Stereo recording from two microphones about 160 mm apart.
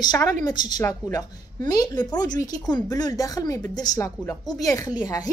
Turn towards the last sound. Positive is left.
turn(degrees=25)  # may be behind; listen again after turning